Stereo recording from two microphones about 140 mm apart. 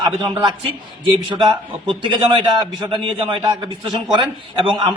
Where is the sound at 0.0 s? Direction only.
35° right (ahead or behind).